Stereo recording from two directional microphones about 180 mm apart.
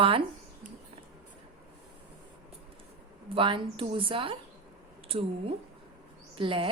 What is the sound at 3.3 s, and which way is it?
A woman's voice, 30° right (ahead or behind).